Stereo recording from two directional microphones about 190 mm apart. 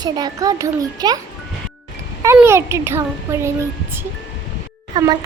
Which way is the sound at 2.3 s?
15° right (ahead or behind).